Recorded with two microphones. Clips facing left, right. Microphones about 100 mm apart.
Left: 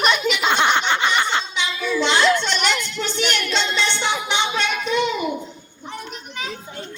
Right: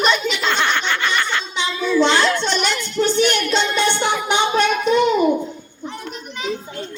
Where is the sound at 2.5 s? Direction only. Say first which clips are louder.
Right 1 dB; centre (ahead or behind).